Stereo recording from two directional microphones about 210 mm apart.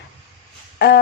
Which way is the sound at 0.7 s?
55° left (ahead or behind).